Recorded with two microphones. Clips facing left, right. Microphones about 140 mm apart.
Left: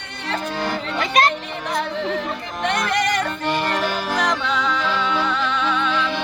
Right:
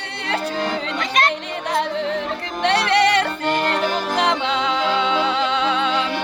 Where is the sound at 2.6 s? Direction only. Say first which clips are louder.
Right 4 dB; 75° right (ahead or behind).